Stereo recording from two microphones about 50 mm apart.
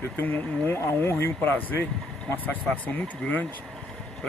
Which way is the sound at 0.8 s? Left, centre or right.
Left.